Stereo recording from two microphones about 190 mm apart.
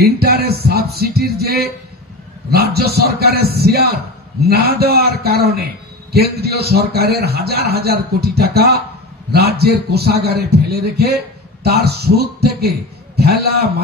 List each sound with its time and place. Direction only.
0.0 s a man's voice: 55° right (ahead or behind)